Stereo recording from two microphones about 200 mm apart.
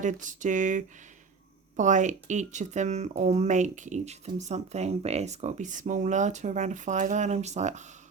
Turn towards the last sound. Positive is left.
turn(degrees=-35)  # may be behind; listen again after turning